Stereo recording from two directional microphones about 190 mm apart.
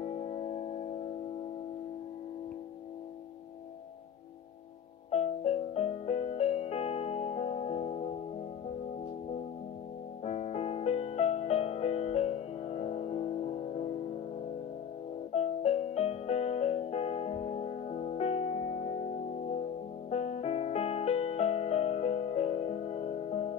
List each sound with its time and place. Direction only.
0.0 s music: 35° left (ahead or behind)
5.1 s music: 35° left (ahead or behind)
10.2 s music: 35° left (ahead or behind)
15.3 s music: 35° left (ahead or behind)
20.1 s music: 35° left (ahead or behind)